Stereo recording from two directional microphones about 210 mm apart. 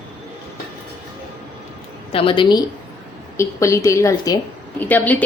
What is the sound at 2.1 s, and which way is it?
A woman's voice, 25° left (ahead or behind).